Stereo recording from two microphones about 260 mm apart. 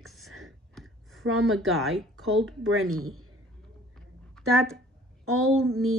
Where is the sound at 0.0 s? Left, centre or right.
Centre.